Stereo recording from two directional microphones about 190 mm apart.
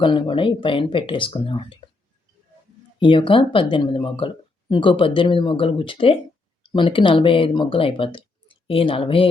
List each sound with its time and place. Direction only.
0.0 s speech: 25° left (ahead or behind)
3.0 s speech: 25° left (ahead or behind)